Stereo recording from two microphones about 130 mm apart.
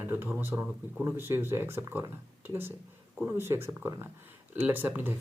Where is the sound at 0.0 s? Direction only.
15° right (ahead or behind).